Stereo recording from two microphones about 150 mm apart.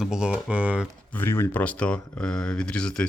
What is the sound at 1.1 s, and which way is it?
Speech, 15° left (ahead or behind).